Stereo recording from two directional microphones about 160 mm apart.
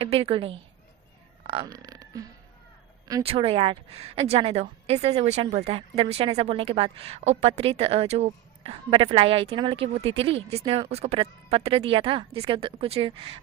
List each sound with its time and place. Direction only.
0.0 s a woman's voice: 35° right (ahead or behind)
3.2 s a woman's voice: 35° right (ahead or behind)